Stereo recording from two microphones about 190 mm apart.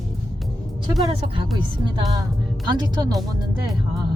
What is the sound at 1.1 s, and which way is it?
Speech, 30° right (ahead or behind).